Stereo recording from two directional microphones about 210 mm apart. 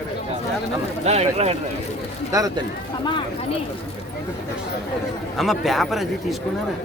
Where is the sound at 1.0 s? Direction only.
30° right (ahead or behind).